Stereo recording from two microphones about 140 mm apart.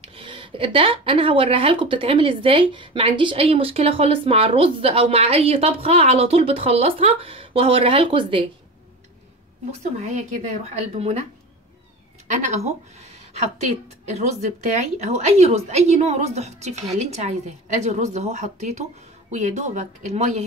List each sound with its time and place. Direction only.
0.0 s speech: 40° right (ahead or behind)
10.0 s a woman's voice: 55° right (ahead or behind)
12.3 s a woman's voice: 55° right (ahead or behind)